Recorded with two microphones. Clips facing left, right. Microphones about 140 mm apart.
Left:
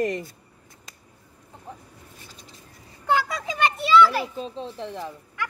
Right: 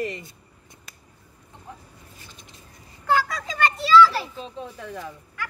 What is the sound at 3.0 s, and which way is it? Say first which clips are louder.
Children playing: even; 15° left (ahead or behind).